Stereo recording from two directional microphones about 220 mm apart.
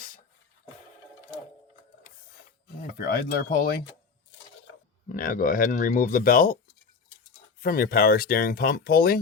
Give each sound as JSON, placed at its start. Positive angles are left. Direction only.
{"t": 3.0, "sound": "speech", "side_deg": 45}
{"t": 5.0, "sound": "speech", "side_deg": 40}
{"t": 7.6, "sound": "speech", "side_deg": 45}